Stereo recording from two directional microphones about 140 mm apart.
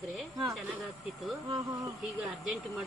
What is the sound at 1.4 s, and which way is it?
Speech, 25° right (ahead or behind).